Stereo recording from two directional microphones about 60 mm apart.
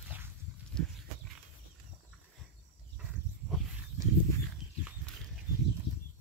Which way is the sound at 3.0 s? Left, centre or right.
Centre.